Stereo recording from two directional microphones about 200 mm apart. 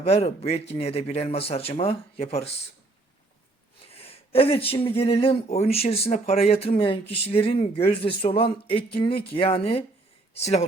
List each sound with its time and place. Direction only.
0.0 s speech: 30° left (ahead or behind)
3.9 s speech: 30° left (ahead or behind)